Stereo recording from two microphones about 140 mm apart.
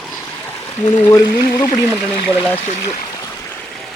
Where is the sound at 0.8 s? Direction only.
25° left (ahead or behind).